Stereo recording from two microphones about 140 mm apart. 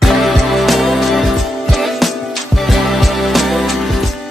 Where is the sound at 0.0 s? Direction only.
Centre (ahead or behind).